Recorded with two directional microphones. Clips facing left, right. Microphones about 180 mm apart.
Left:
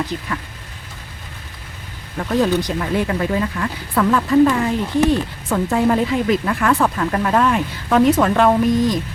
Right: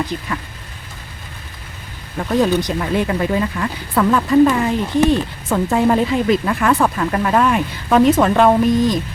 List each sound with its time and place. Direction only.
0.1 s speech: 20° left (ahead or behind)
2.1 s speech: 15° right (ahead or behind)
6.9 s speech: 5° right (ahead or behind); by 9.0 s 25° right (ahead or behind)